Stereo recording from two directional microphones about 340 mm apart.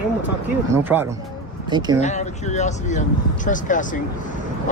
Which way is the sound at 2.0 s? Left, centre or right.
Centre.